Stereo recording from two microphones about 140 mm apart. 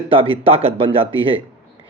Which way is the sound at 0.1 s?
40° right (ahead or behind).